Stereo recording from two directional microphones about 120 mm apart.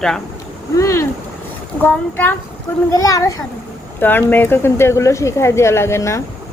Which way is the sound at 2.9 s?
30° left (ahead or behind).